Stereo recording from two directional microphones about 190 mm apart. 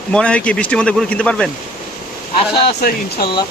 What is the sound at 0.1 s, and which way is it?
Speech, 5° left (ahead or behind).